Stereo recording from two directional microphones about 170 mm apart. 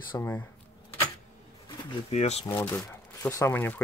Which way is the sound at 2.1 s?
40° left (ahead or behind).